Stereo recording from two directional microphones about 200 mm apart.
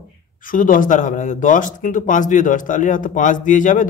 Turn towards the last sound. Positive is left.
turn(degrees=40)  # may be behind; listen again after turning